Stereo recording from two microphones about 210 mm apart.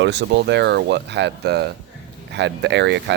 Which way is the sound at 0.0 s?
55° right (ahead or behind).